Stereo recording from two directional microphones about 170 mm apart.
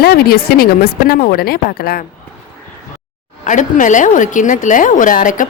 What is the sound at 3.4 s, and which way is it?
A woman's voice, 45° left (ahead or behind).